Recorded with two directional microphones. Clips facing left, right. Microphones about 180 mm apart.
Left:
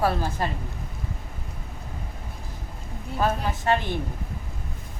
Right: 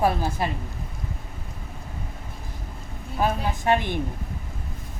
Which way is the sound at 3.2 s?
15° right (ahead or behind).